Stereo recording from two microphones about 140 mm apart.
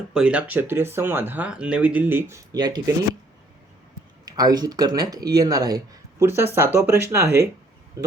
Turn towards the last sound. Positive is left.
turn(degrees=-20)  # may be behind; listen again after turning